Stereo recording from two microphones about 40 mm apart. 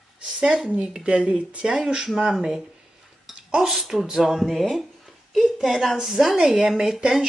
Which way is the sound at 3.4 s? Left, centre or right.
Centre.